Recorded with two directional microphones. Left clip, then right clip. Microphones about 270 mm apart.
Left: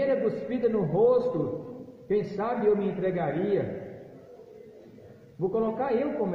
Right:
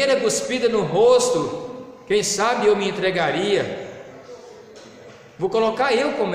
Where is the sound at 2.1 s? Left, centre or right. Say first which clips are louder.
Right 9 dB; centre.